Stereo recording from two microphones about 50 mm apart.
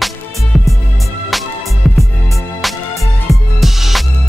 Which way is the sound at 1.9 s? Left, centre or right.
Left.